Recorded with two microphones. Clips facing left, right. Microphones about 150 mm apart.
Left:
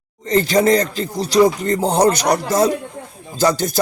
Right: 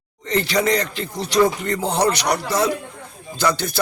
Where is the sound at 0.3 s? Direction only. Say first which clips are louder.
Left 5 dB; 45° left (ahead or behind).